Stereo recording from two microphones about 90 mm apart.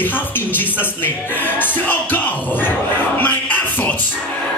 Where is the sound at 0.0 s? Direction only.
20° left (ahead or behind).